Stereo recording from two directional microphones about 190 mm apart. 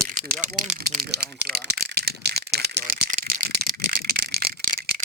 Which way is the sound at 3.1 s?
45° right (ahead or behind).